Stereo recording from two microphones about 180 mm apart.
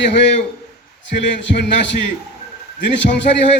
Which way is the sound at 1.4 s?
75° left (ahead or behind).